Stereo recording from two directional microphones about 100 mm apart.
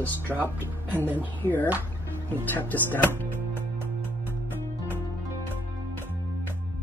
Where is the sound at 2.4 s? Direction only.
20° left (ahead or behind).